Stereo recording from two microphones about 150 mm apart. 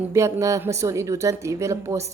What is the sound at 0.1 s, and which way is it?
A woman's voice, 20° right (ahead or behind).